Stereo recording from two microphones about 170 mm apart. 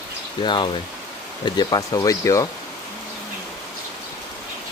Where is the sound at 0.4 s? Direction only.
25° left (ahead or behind).